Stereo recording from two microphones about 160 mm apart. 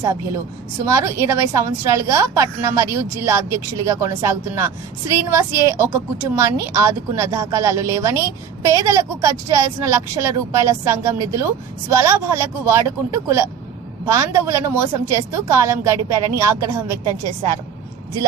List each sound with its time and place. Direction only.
0.9 s a woman's voice: 15° right (ahead or behind)